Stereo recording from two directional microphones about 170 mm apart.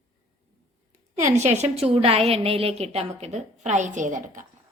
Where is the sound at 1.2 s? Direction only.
45° right (ahead or behind).